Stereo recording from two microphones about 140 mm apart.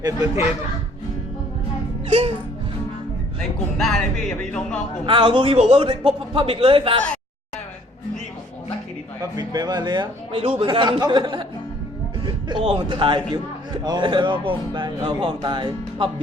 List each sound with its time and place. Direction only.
2.0 s music: 45° right (ahead or behind)
3.8 s music: 5° left (ahead or behind)
5.0 s a man's voice: 35° right (ahead or behind)
9.4 s a man's voice: 30° right (ahead or behind)